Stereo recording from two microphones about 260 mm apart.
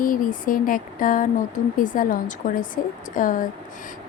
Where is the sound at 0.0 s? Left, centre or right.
Left.